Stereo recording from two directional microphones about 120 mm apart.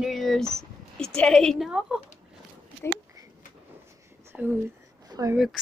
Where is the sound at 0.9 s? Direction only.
5° left (ahead or behind).